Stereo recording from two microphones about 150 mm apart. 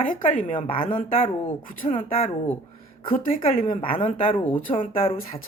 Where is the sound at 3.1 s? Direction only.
70° left (ahead or behind).